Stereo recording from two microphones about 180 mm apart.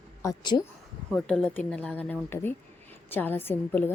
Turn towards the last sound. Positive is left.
turn(degrees=10)  # may be behind; listen again after turning